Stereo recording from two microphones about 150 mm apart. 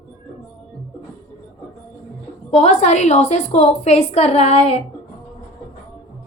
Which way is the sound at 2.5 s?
45° left (ahead or behind).